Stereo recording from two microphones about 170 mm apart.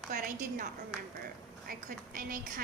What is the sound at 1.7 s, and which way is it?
Speech, 55° right (ahead or behind).